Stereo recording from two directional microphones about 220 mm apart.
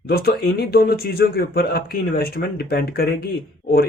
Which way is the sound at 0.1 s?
45° left (ahead or behind).